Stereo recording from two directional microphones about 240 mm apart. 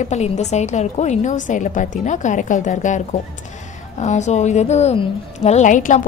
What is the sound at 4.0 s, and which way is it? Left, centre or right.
A woman's voice, left.